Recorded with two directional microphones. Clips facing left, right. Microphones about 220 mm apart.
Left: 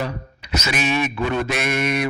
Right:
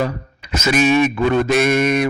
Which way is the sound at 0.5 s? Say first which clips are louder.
Right 7 dB; 45° right (ahead or behind).